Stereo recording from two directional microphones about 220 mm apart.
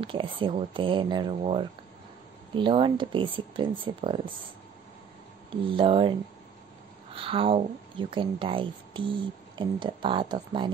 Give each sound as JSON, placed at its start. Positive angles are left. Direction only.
{"t": 0.0, "sound": "speech", "side_deg": -25}
{"t": 5.5, "sound": "speech", "side_deg": -25}
{"t": 7.2, "sound": "speech", "side_deg": -25}